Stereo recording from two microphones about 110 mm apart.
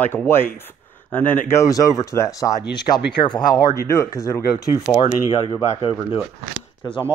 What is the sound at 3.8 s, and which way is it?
Speech, 25° left (ahead or behind).